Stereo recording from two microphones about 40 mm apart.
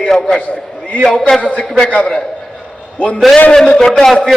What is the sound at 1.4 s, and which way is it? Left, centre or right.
Speech, left.